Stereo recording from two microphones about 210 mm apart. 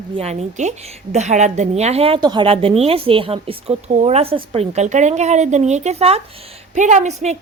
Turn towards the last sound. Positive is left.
turn(degrees=-35)  # may be behind; listen again after turning